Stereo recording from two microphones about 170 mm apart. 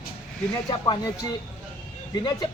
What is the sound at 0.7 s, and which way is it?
Speech, 25° left (ahead or behind).